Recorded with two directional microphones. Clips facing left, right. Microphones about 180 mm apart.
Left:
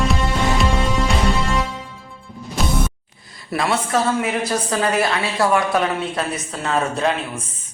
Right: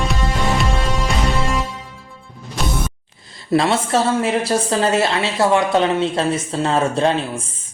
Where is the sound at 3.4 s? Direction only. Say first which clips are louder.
Right 5 dB; 25° right (ahead or behind).